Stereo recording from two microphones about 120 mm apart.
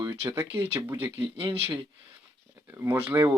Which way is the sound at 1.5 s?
55° right (ahead or behind).